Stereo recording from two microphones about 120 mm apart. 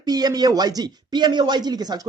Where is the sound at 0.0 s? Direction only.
35° right (ahead or behind).